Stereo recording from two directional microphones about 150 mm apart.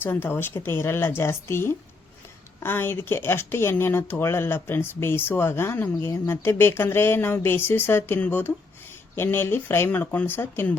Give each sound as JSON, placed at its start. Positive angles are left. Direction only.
{"t": 0.0, "sound": "speech", "side_deg": 15}